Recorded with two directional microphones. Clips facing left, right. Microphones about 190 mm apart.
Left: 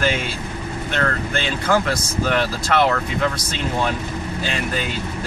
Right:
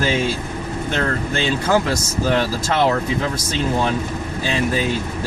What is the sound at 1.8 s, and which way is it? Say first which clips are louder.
Speech: right 2 dB; 25° right (ahead or behind).